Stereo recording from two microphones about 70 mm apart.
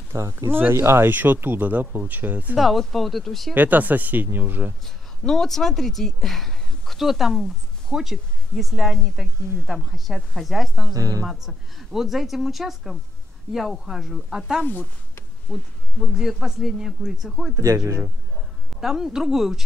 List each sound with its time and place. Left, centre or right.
0.1 s speech: right
0.5 s speech: right
2.5 s speech: centre
3.5 s speech: right
4.8 s speech: centre
10.9 s speech: right
11.2 s speech: centre
14.6 s speech: left
15.5 s speech: centre
16.0 s speech: centre
17.6 s speech: right
18.7 s speech: centre